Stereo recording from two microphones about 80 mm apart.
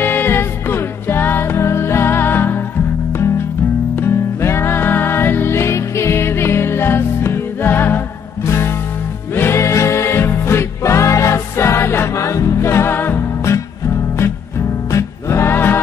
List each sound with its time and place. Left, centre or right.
0.0 s music: left
4.0 s music: left
14.9 s music: left